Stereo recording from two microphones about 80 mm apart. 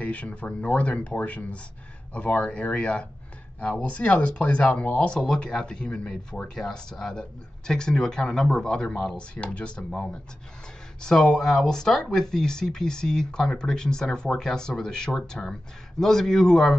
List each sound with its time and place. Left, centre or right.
0.0 s speech: centre